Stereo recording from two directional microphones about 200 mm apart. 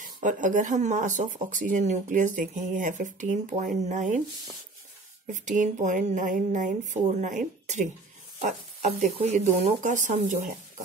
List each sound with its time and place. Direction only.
0.0 s speech: 40° right (ahead or behind)
5.2 s speech: 40° right (ahead or behind)